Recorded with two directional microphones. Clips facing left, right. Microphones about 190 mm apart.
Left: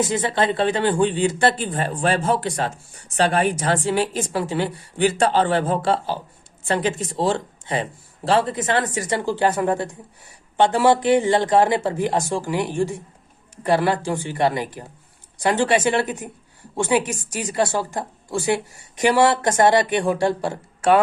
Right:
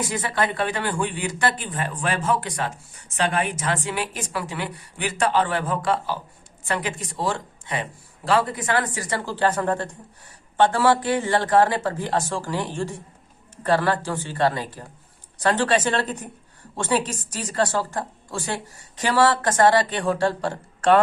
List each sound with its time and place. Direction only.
0.0 s a woman's voice: 25° left (ahead or behind); by 21.0 s 10° left (ahead or behind)